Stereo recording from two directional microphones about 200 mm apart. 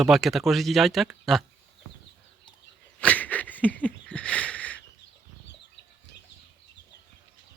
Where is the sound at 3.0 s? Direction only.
5° left (ahead or behind).